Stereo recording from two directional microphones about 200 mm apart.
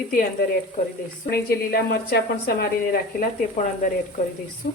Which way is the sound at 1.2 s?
50° left (ahead or behind).